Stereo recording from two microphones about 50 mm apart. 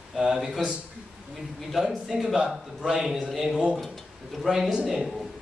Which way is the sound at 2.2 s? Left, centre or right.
Centre.